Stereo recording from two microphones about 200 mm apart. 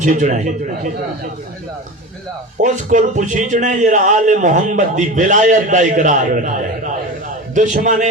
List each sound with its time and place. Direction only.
0.0 s a man's voice: 40° right (ahead or behind)
2.6 s a man's voice: 40° right (ahead or behind)